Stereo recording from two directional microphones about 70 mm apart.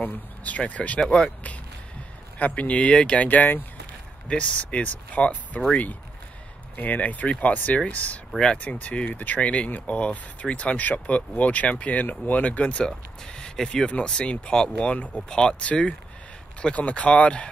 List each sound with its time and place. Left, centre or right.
0.0 s speech: left